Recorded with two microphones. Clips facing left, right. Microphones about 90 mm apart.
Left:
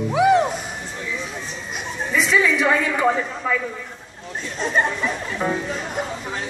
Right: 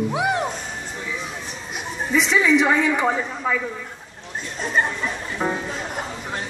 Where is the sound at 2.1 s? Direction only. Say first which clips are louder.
Right 1 dB; 15° right (ahead or behind).